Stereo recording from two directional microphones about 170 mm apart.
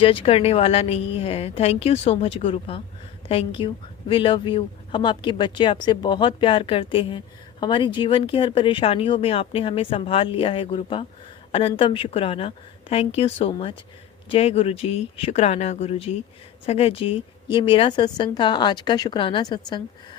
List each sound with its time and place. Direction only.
0.0 s a woman's voice: 30° left (ahead or behind)